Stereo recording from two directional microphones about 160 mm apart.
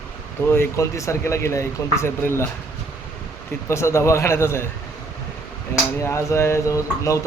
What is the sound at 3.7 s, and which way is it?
Speech, 15° left (ahead or behind).